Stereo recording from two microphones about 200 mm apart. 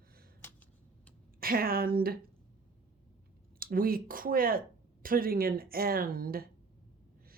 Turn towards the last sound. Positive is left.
turn(degrees=-45)  # may be behind; listen again after turning